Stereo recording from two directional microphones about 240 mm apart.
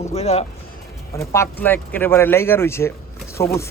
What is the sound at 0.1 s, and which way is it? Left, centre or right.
Speech, left.